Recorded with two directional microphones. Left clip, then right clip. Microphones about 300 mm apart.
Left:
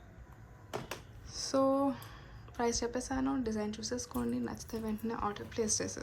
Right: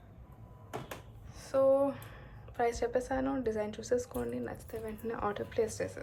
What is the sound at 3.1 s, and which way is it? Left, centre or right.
A woman's voice, centre.